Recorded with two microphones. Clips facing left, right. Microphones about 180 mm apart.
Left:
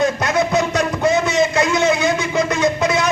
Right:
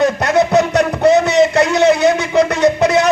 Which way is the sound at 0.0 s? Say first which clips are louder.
Right 4 dB; 65° right (ahead or behind).